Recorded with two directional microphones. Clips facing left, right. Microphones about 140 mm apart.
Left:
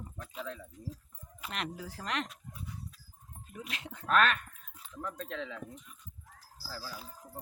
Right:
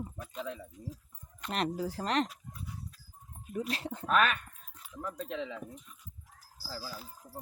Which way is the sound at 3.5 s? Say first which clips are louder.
Right 9 dB; 35° right (ahead or behind).